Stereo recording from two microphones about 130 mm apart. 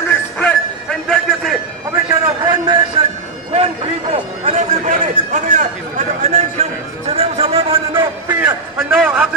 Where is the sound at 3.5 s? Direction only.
55° right (ahead or behind).